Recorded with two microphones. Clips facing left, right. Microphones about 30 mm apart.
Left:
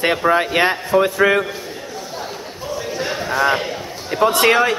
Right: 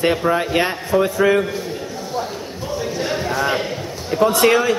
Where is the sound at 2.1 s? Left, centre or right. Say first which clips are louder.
Right 4 dB; centre.